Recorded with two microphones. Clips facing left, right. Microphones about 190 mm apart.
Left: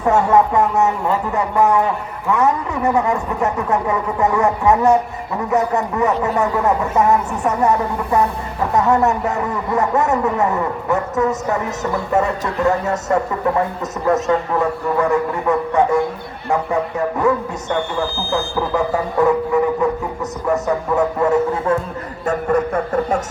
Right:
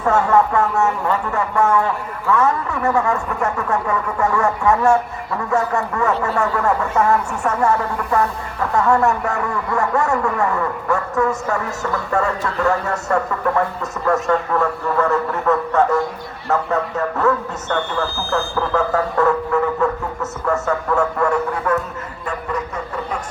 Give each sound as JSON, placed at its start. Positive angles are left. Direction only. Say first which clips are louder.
{"t": 0.0, "sound": "speech", "louder": "left 2 dB", "side_deg": 15}
{"t": 22.3, "sound": "speech", "louder": "left 8 dB", "side_deg": 50}